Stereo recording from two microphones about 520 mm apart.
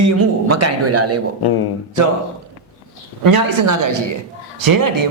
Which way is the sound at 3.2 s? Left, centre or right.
Right.